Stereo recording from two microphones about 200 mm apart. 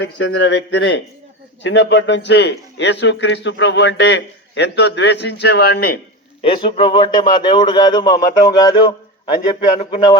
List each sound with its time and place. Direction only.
0.0 s a man's voice: 65° left (ahead or behind)
6.4 s a man's voice: 25° left (ahead or behind)